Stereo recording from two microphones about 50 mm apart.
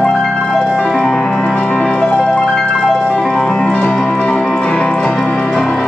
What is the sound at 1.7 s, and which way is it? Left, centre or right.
Music, centre.